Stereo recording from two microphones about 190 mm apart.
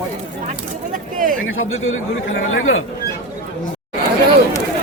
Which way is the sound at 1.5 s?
90° left.